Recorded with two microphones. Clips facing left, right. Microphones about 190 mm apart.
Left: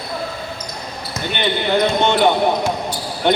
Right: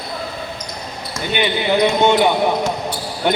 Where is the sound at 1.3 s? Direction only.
10° right (ahead or behind).